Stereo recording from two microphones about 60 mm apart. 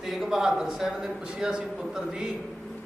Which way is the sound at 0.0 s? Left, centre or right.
Centre.